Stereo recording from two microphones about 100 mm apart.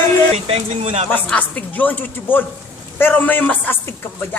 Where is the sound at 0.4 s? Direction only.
80° right.